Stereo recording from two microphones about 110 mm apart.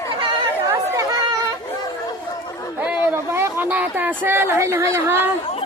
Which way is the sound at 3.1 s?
20° right (ahead or behind).